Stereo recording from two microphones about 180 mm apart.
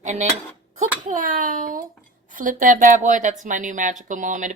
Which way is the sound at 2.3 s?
45° right (ahead or behind).